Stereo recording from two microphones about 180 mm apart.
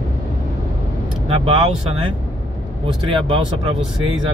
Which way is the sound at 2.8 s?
30° right (ahead or behind).